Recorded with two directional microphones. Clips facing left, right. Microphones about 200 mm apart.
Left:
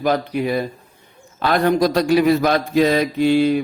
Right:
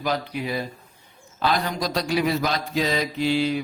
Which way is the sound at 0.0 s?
55° left (ahead or behind).